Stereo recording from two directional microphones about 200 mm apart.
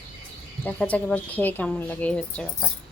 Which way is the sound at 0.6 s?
5° left (ahead or behind).